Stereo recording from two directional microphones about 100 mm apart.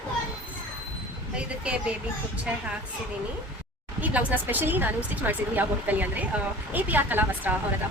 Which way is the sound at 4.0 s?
15° right (ahead or behind).